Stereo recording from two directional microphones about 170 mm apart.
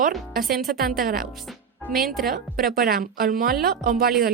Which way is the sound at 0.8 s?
60° right (ahead or behind).